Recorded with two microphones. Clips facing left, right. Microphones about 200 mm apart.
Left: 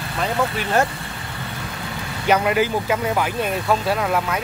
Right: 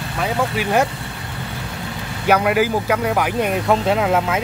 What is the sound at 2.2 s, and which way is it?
Speech, 10° right (ahead or behind).